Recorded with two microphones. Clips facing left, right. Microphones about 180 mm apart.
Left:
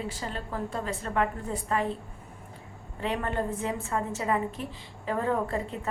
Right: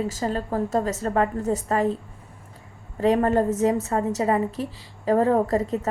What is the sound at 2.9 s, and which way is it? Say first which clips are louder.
A woman's voice: right 11 dB; 40° right (ahead or behind).